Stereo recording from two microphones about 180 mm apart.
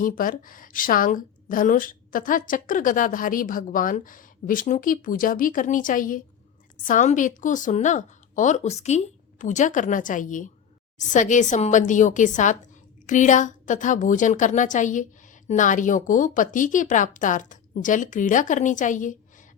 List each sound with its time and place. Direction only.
0.0 s a woman's voice: 50° left (ahead or behind)